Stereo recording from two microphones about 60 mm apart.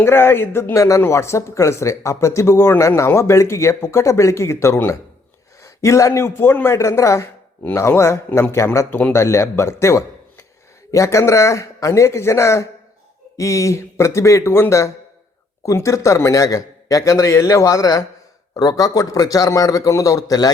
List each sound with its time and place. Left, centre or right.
0.0 s speech: left
0.7 s a man's voice: left
6.7 s a man's voice: left